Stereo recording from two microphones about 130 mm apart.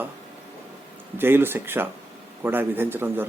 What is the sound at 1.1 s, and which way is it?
Speech, 15° right (ahead or behind).